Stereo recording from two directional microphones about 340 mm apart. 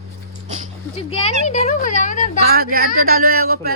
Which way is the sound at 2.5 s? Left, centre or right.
Right.